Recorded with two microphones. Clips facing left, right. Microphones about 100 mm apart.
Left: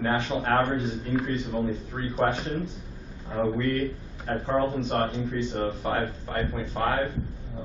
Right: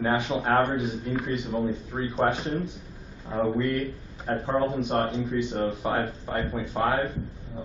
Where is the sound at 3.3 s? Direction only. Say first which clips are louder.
Right 1 dB; 10° right (ahead or behind).